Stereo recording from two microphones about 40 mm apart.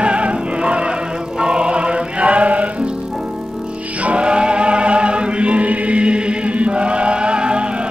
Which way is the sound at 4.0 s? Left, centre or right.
Right.